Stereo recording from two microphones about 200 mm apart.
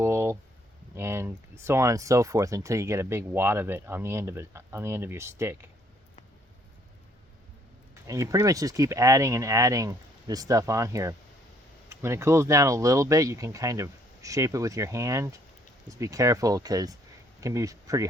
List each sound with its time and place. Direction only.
0.0 s a sound: 10° right (ahead or behind)
0.9 s speech: 15° right (ahead or behind)
8.0 s speech: 15° right (ahead or behind)